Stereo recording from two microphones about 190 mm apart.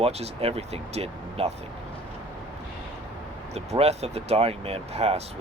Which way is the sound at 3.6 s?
35° right (ahead or behind).